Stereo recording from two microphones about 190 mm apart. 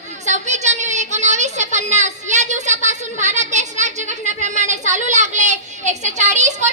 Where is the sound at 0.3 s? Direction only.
40° right (ahead or behind).